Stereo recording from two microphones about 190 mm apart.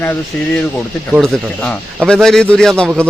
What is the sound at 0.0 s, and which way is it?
A man's voice, 10° left (ahead or behind).